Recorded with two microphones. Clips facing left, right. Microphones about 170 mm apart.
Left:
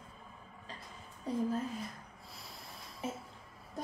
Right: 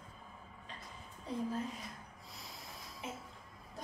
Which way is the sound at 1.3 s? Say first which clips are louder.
Left 5 dB; 45° left (ahead or behind).